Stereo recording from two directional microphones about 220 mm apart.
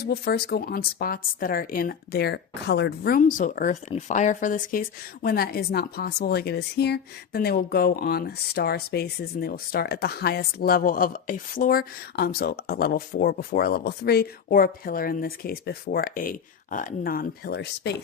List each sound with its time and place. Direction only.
0.0 s speech: 45° left (ahead or behind)